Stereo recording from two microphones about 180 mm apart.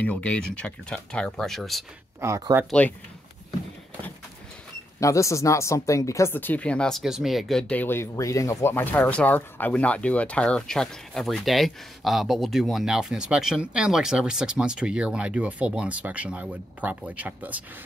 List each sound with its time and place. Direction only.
0.0 s speech: 10° left (ahead or behind)
2.1 s speech: 15° right (ahead or behind)
2.8 s speech: 5° left (ahead or behind)
5.0 s speech: 15° left (ahead or behind); by 17.6 s 10° right (ahead or behind)